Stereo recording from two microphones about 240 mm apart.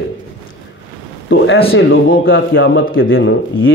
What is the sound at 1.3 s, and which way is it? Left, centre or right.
Speech, left.